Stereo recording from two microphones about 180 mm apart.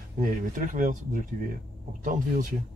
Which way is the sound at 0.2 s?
45° right (ahead or behind).